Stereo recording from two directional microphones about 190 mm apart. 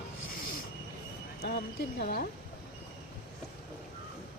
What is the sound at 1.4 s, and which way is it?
Speech, 55° left (ahead or behind).